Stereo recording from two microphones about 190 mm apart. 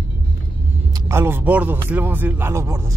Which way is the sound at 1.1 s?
10° right (ahead or behind).